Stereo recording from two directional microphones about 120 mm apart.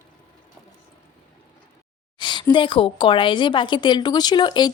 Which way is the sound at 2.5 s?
45° left (ahead or behind).